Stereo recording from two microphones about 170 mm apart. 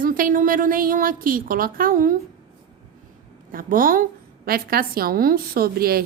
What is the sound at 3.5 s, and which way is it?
A woman's voice, 55° right (ahead or behind).